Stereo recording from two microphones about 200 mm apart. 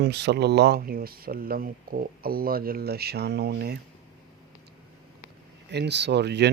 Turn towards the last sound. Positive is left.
turn(degrees=-60)  # may be behind; listen again after turning